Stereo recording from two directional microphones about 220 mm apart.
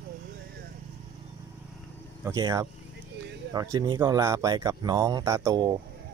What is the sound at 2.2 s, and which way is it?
Speech, 15° right (ahead or behind).